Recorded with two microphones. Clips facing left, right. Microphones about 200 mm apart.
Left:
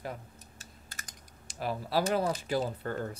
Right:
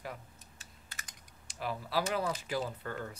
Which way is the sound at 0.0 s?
35° left (ahead or behind).